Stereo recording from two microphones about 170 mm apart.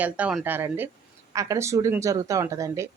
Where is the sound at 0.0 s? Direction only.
5° right (ahead or behind).